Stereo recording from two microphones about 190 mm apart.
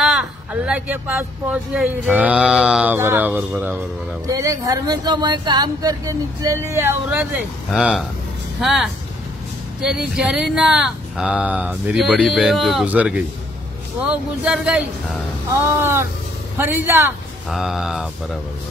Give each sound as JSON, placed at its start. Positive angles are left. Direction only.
{"t": 0.0, "sound": "speech", "side_deg": -5}